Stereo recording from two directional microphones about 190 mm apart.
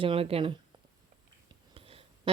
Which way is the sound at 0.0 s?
30° right (ahead or behind).